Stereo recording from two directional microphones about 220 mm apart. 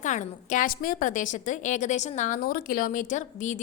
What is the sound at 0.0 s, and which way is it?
A woman's voice, 35° left (ahead or behind).